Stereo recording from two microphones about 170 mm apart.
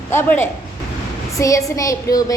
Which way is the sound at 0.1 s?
15° left (ahead or behind).